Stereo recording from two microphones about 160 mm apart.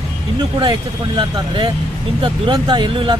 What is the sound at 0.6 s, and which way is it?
Speech, 30° right (ahead or behind).